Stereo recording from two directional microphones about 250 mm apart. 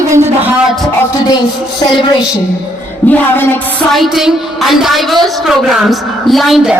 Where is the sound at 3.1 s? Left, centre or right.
Centre.